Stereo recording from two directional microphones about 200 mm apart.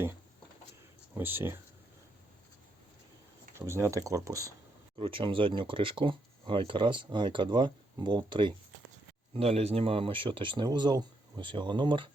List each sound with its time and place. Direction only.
1.1 s speech: 10° right (ahead or behind)
3.6 s speech: 15° right (ahead or behind)
4.9 s speech: 25° right (ahead or behind)